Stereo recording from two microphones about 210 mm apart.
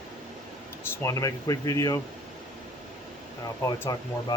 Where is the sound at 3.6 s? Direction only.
15° left (ahead or behind).